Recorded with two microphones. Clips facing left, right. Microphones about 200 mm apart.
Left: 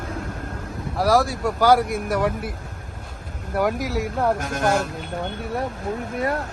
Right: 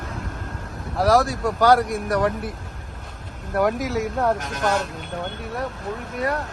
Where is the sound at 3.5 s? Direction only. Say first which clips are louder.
Right 1 dB; centre (ahead or behind).